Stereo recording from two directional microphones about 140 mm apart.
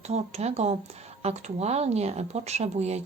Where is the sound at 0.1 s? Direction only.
50° right (ahead or behind).